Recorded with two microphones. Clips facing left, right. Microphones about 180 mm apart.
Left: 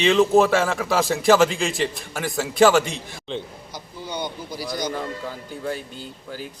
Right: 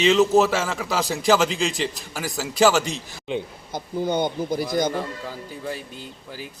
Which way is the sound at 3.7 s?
50° right (ahead or behind).